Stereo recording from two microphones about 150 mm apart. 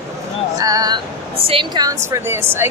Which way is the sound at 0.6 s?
25° right (ahead or behind).